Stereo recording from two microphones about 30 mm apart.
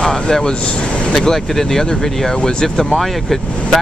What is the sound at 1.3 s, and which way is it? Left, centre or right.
Speech, centre.